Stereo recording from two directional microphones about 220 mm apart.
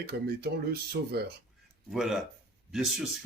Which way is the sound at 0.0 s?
45° right (ahead or behind).